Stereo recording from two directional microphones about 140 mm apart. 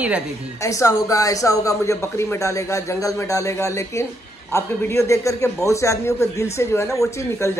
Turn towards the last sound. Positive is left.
turn(degrees=20)  # may be behind; listen again after turning